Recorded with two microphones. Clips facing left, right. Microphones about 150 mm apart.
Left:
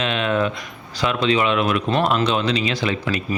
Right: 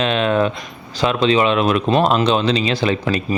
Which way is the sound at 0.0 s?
35° right (ahead or behind).